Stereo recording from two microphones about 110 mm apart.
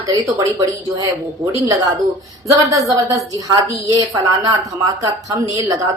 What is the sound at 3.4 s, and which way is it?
Speech, 35° right (ahead or behind).